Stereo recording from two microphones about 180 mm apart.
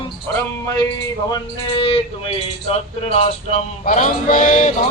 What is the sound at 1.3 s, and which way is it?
Speech, 30° left (ahead or behind).